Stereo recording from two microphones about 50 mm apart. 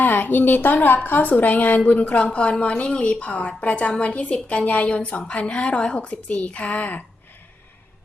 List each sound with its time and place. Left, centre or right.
0.0 s a woman's voice: left